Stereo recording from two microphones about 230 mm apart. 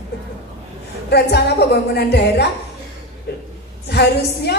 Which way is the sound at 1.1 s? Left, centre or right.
Left.